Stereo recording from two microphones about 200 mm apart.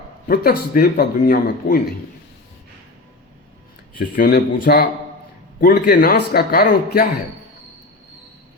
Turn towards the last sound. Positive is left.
turn(degrees=50)  # may be behind; listen again after turning